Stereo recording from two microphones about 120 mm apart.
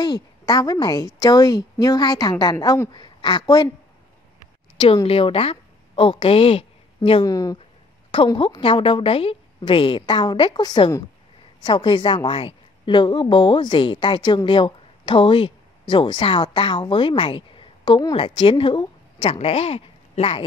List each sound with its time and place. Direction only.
0.0 s a woman's voice: 35° left (ahead or behind)
4.7 s a woman's voice: 45° left (ahead or behind)
7.2 s a woman's voice: 30° left (ahead or behind)
8.4 s a woman's voice: 45° left (ahead or behind)